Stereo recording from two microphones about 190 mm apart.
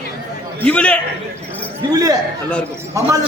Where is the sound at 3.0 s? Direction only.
15° right (ahead or behind).